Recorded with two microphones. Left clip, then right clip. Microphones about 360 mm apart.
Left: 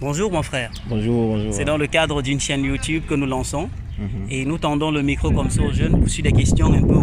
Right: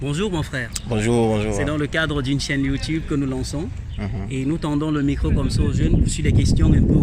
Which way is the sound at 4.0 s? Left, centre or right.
Right.